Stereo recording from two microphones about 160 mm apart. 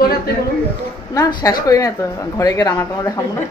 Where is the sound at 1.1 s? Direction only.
25° left (ahead or behind).